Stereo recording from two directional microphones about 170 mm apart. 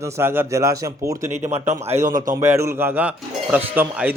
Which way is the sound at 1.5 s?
40° right (ahead or behind).